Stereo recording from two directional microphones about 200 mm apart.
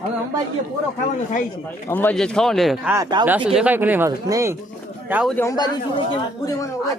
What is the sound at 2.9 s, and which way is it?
Speech, 20° right (ahead or behind).